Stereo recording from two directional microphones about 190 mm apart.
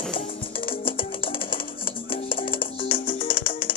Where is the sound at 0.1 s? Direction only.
30° left (ahead or behind).